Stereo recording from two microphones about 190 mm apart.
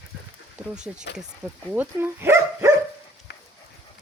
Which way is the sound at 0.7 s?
5° right (ahead or behind).